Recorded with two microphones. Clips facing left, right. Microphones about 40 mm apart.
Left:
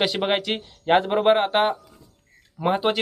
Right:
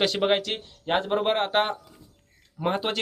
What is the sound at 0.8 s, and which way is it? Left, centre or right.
Speech, left.